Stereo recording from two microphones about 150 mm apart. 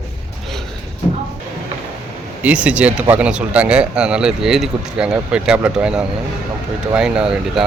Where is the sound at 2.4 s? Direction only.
10° right (ahead or behind).